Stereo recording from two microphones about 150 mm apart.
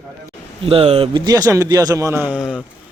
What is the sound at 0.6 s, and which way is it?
Speech, 40° right (ahead or behind).